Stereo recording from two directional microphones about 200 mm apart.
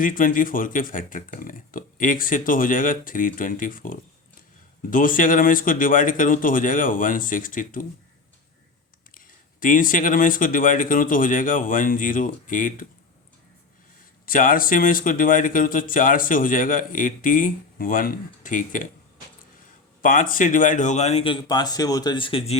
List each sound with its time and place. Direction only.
0.0 s speech: 45° left (ahead or behind)
9.1 s speech: 45° left (ahead or behind)
14.3 s speech: 45° left (ahead or behind)
20.0 s speech: 40° left (ahead or behind)
21.4 s speech: 20° left (ahead or behind)